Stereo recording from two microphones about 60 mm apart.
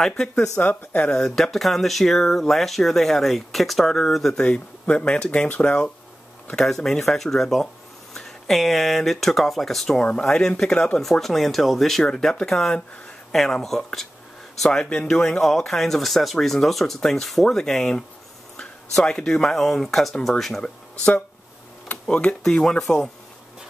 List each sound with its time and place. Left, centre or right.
0.6 s speech: left
1.1 s speech: centre
6.5 s speech: centre
10.0 s speech: centre
22.0 s speech: centre